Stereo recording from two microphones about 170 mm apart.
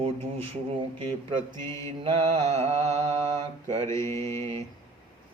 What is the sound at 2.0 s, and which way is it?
Mantra, 30° right (ahead or behind).